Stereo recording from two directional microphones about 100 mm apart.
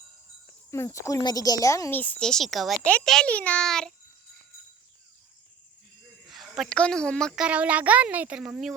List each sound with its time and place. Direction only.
0.7 s speech: 30° left (ahead or behind)
1.2 s a woman's voice: 40° left (ahead or behind)
1.9 s a child's voice: 15° left (ahead or behind)
6.2 s a sound: centre (ahead or behind)
6.7 s a child's voice: 10° left (ahead or behind)
7.3 s speech: 10° right (ahead or behind)